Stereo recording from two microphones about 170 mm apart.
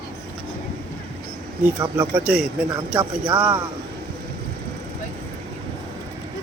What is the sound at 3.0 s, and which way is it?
Speech, 30° right (ahead or behind).